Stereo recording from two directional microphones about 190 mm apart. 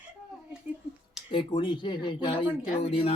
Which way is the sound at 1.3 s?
25° left (ahead or behind).